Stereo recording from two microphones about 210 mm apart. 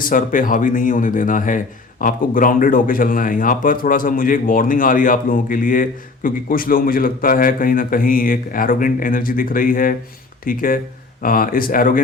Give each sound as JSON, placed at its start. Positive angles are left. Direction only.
{"t": 0.0, "sound": "speech", "side_deg": 40}